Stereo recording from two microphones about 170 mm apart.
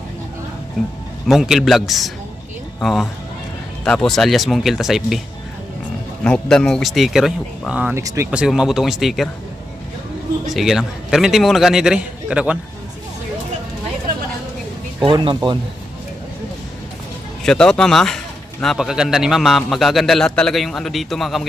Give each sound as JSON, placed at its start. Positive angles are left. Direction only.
{"t": 1.3, "sound": "speech", "side_deg": 0}
{"t": 6.2, "sound": "speech", "side_deg": 5}
{"t": 10.4, "sound": "speech", "side_deg": 0}
{"t": 15.0, "sound": "speech", "side_deg": -30}
{"t": 17.4, "sound": "speech", "side_deg": 5}